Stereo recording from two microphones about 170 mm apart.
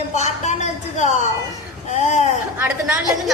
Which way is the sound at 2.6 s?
15° right (ahead or behind).